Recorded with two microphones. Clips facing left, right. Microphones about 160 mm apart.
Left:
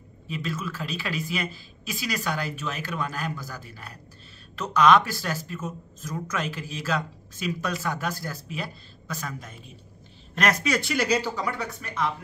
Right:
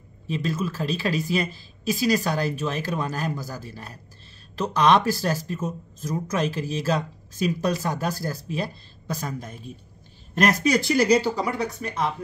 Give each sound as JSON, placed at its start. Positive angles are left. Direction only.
{"t": 0.3, "sound": "speech", "side_deg": -35}
{"t": 10.7, "sound": "speech", "side_deg": -35}